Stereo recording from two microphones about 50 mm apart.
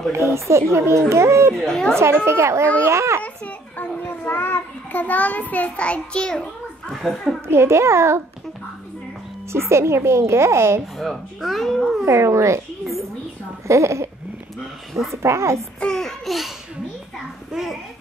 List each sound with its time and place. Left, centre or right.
0.1 s speech: right
1.7 s a child's voice: centre
2.0 s a woman's voice: right
3.2 s children playing: left
4.3 s child singing: left
5.0 s a child's voice: left
6.9 s speech: centre
7.4 s speech: right
9.5 s speech: right
11.0 s speech: centre
12.1 s speech: right
15.2 s speech: right
15.8 s a child's voice: centre
17.5 s a child's voice: centre